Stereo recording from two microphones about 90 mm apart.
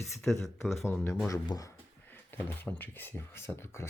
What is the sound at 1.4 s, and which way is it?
Speech, 40° left (ahead or behind).